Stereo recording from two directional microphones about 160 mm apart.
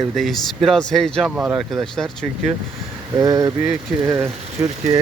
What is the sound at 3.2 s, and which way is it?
Speech, 20° right (ahead or behind).